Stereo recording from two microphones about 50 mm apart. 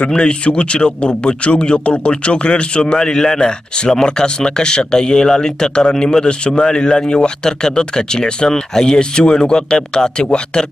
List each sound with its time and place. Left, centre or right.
0.1 s speech: centre